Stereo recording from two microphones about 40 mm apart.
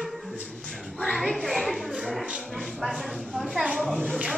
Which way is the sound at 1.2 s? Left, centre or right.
Centre.